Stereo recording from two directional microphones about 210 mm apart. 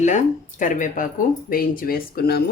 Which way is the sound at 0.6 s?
40° left (ahead or behind).